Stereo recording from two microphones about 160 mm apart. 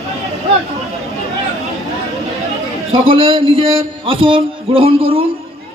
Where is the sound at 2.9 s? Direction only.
35° right (ahead or behind).